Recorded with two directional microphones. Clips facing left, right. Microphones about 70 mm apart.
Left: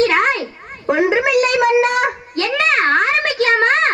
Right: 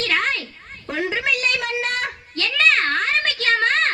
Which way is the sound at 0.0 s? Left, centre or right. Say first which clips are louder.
Left 8 dB; centre.